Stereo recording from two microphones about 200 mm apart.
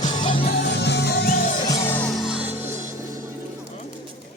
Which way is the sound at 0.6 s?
60° left (ahead or behind).